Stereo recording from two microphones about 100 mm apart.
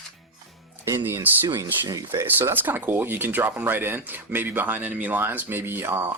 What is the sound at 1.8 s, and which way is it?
Speech, 40° right (ahead or behind).